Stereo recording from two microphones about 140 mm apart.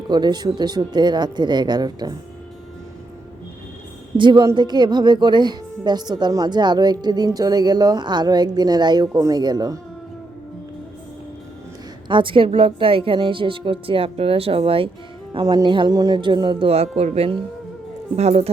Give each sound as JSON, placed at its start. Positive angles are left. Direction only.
{"t": 0.1, "sound": "a woman's voice", "side_deg": -30}
{"t": 4.2, "sound": "a woman's voice", "side_deg": -35}
{"t": 12.0, "sound": "a woman's voice", "side_deg": -35}